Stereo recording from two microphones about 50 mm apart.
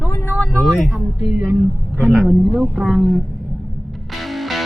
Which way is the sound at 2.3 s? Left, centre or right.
Right.